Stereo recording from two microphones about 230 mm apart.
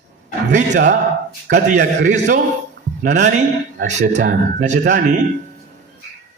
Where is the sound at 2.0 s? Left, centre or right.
Right.